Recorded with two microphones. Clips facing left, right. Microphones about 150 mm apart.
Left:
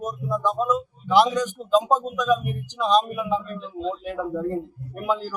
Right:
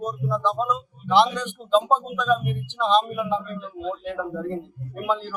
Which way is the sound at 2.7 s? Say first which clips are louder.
Even; 5° left (ahead or behind).